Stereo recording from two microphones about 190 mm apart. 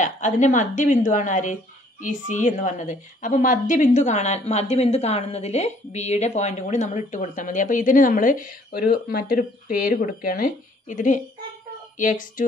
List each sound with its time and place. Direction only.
0.0 s a woman's voice: 40° left (ahead or behind)